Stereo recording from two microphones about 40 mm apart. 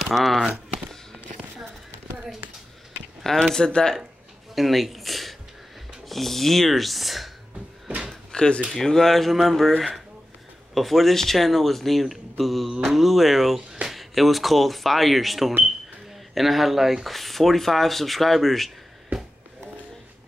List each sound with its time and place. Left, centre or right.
0.1 s speech: centre
3.3 s speech: centre
4.6 s speech: centre
8.3 s speech: left
8.7 s speech: centre